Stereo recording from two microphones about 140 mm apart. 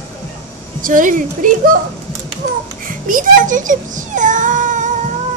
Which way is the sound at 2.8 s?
75° right (ahead or behind).